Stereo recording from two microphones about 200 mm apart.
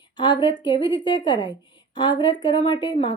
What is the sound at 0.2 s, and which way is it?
Speech, 25° left (ahead or behind).